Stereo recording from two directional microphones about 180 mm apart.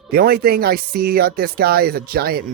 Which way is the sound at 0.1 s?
60° right (ahead or behind).